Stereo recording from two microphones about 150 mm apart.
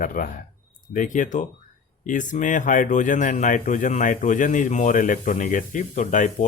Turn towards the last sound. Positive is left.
turn(degrees=55)  # may be behind; listen again after turning